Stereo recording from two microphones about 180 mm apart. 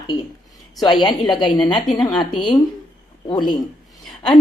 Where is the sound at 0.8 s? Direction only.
25° left (ahead or behind).